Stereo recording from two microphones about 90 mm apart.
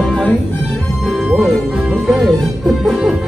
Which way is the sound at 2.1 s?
Centre (ahead or behind).